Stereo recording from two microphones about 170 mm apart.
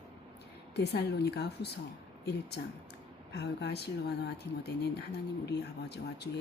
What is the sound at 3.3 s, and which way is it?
Speech, 85° left.